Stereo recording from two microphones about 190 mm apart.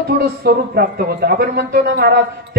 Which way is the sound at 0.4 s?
55° right (ahead or behind).